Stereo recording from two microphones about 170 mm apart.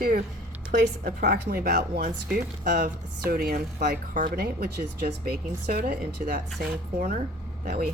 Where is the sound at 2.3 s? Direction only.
50° right (ahead or behind).